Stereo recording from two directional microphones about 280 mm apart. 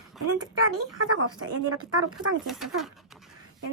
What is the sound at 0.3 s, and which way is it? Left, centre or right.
A woman's voice, right.